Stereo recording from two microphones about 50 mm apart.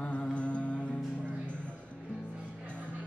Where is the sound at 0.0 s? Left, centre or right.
Left.